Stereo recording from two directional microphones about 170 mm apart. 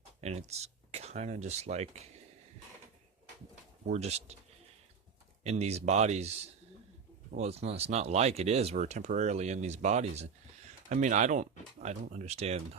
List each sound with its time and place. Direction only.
0.2 s speech: 40° right (ahead or behind)
3.5 s speech: 45° right (ahead or behind)
5.4 s speech: 40° right (ahead or behind)
7.3 s speech: 40° right (ahead or behind)